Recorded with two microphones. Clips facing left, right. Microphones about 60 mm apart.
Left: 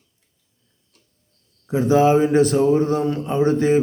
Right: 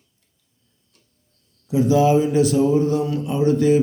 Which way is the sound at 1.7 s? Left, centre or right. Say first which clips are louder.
Left 1 dB; left.